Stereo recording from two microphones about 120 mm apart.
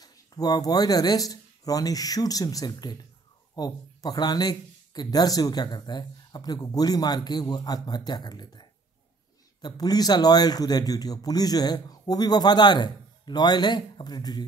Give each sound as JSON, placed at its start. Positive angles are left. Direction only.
{"t": 0.0, "sound": "speech", "side_deg": 35}